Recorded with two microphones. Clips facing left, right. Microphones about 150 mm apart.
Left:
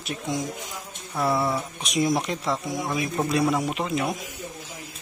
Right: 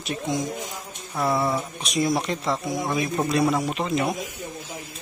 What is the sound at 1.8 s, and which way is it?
Speech, 15° left (ahead or behind).